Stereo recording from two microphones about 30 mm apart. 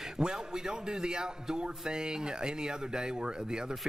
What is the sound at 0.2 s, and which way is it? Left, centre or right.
A man's voice, right.